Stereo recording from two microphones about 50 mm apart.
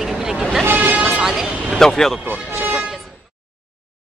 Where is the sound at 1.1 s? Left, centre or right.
Centre.